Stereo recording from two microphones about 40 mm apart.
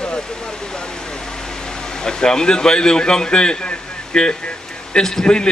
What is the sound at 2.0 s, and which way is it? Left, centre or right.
A man's voice, centre.